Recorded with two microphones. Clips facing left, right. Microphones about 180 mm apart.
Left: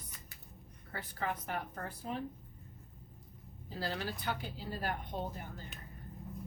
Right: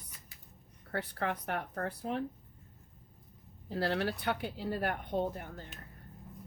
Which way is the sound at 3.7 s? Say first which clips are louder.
Right 7 dB; 65° right (ahead or behind).